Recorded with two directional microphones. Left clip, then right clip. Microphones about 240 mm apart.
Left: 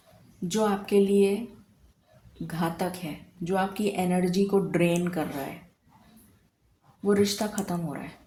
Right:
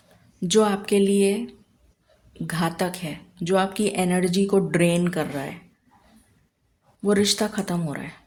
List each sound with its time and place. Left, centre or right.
0.4 s speech: right
2.5 s speech: right
7.0 s speech: right